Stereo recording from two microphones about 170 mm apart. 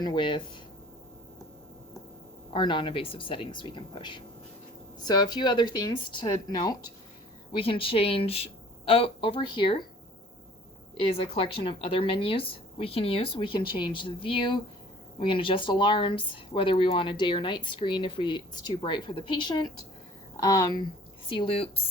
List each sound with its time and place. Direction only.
0.0 s speech: 25° left (ahead or behind)
2.5 s a woman's voice: 30° left (ahead or behind)
10.9 s a woman's voice: 30° left (ahead or behind)
21.2 s a woman's voice: 30° left (ahead or behind)